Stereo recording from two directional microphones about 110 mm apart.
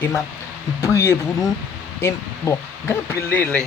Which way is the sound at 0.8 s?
25° left (ahead or behind).